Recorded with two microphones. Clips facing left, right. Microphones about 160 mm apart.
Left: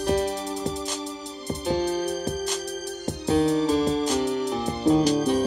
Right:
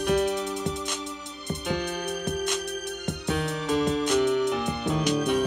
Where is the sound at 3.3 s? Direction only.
35° left (ahead or behind).